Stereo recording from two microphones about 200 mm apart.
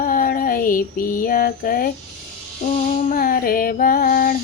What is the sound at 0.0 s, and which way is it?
Female singing, 45° left (ahead or behind).